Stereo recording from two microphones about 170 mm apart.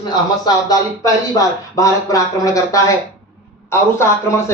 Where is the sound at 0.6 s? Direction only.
20° left (ahead or behind).